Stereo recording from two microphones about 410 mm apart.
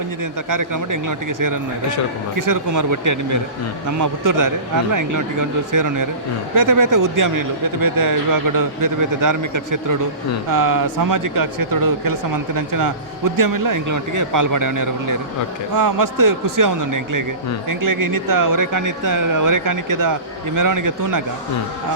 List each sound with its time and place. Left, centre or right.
0.5 s speech: right